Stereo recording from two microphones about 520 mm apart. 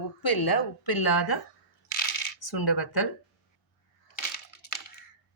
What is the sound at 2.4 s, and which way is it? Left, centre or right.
Speech, left.